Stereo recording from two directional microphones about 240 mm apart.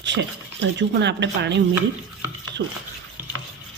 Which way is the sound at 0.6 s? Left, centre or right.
Right.